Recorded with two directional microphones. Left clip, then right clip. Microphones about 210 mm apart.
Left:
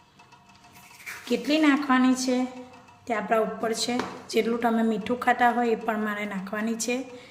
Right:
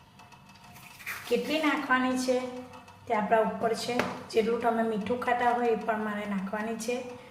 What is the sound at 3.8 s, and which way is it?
A woman's voice, 45° left (ahead or behind).